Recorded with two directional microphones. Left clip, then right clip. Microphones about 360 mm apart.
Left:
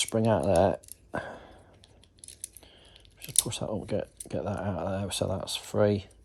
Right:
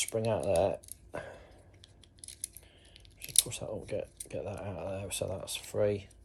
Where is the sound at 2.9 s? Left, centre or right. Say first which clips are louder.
Even; centre.